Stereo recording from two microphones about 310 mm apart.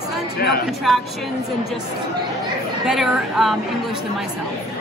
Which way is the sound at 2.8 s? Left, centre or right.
Centre.